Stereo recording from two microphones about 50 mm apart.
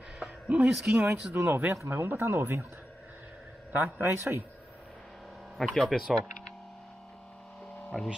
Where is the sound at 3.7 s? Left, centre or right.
Right.